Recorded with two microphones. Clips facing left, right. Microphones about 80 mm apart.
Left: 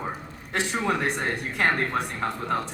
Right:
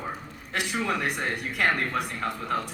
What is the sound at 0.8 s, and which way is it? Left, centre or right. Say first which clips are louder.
Speech: left 2 dB; left.